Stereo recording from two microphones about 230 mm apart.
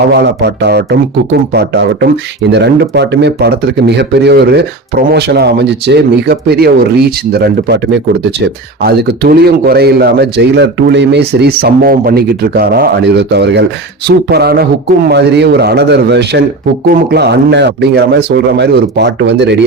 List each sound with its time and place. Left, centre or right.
0.1 s speech: right